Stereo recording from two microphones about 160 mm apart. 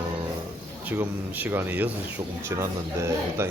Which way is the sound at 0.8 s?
10° right (ahead or behind).